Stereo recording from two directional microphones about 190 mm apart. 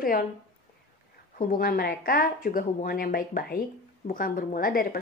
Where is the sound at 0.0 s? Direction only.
50° left (ahead or behind).